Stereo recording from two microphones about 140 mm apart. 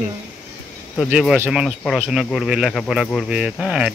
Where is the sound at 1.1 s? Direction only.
5° right (ahead or behind).